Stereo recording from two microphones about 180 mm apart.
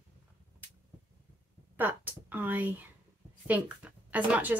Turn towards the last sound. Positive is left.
turn(degrees=-10)  # may be behind; listen again after turning